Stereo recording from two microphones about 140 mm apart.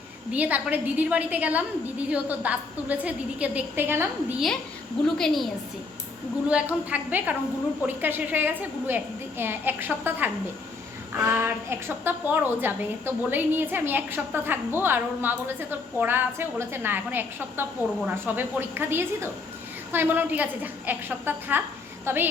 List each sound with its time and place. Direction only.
0.3 s a woman's voice: 10° right (ahead or behind)
5.0 s a woman's voice: 5° left (ahead or behind)
6.5 s a woman's voice: 10° right (ahead or behind)